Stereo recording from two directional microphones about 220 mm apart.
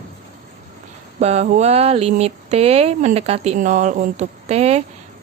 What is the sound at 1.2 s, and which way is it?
A woman's voice, 30° right (ahead or behind).